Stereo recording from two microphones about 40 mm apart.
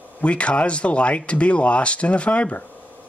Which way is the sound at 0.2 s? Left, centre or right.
Left.